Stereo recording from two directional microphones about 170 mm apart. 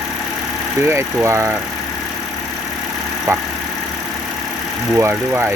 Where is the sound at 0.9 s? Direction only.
15° right (ahead or behind).